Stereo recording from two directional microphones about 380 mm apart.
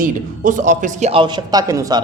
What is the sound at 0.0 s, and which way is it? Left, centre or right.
A man's voice, centre.